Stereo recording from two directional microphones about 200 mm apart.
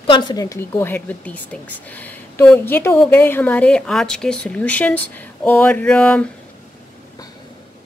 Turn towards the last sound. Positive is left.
turn(degrees=5)  # may be behind; listen again after turning